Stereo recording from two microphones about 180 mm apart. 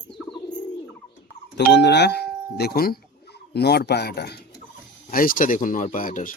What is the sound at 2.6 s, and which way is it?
Speech, 60° left (ahead or behind).